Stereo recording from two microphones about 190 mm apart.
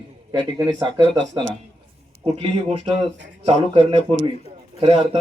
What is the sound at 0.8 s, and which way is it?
Speech, 25° right (ahead or behind).